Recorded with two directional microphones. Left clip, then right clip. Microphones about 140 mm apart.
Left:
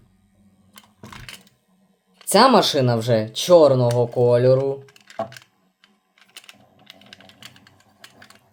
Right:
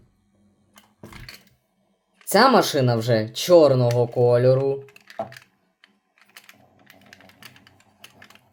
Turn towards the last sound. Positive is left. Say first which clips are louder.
# left 3 dB
turn(degrees=25)  # may be behind; listen again after turning